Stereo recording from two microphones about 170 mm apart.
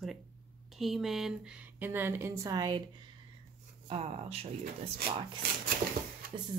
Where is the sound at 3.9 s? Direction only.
35° right (ahead or behind).